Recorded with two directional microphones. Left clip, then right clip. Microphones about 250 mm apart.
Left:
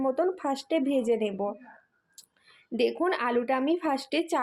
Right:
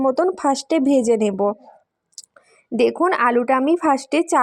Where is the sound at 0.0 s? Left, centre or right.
Right.